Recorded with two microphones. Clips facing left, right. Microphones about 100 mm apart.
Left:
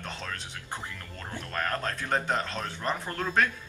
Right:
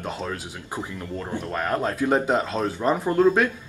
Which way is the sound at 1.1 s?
20° right (ahead or behind).